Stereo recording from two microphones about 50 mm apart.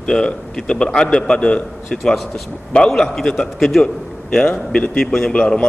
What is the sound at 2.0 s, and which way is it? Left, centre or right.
A man's voice, centre.